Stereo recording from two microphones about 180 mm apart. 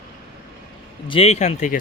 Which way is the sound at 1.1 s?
35° left (ahead or behind).